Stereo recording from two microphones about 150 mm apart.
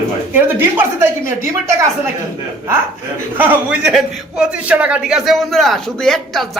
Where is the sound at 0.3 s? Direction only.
15° right (ahead or behind).